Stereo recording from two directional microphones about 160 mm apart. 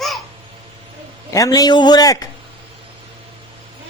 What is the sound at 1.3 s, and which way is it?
Speech, 20° left (ahead or behind).